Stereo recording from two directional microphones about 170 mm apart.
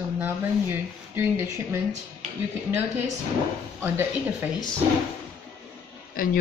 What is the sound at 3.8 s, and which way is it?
Speech, 15° right (ahead or behind).